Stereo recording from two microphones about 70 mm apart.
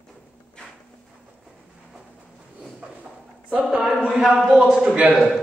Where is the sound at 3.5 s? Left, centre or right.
Centre.